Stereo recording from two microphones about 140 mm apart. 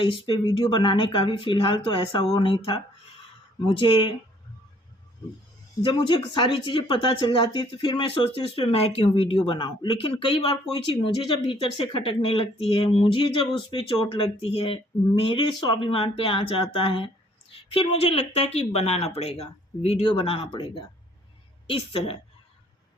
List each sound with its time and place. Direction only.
0.0 s speech: 35° left (ahead or behind)
5.8 s a woman's voice: 35° left (ahead or behind)
20.5 s speech: 35° left (ahead or behind)